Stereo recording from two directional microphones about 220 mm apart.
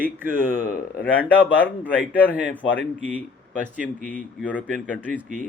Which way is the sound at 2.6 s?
60° left (ahead or behind).